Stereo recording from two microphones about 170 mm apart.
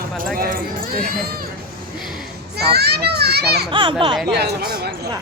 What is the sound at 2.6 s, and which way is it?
A child's voice, 70° right (ahead or behind).